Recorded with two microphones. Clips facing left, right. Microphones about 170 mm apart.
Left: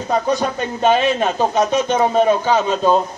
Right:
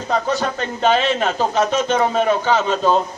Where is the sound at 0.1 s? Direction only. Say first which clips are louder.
Left 2 dB; 15° left (ahead or behind).